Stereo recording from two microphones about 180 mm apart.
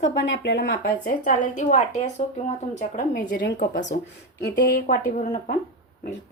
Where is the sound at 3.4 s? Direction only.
75° left (ahead or behind).